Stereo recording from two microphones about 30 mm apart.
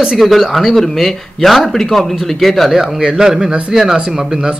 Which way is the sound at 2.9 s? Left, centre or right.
Right.